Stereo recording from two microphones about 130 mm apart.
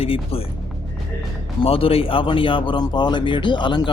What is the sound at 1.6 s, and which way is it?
Speech, 45° left (ahead or behind).